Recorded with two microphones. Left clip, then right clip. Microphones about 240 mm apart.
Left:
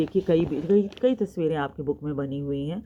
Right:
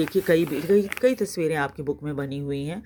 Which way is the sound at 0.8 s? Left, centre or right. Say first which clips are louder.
Right 2 dB; right.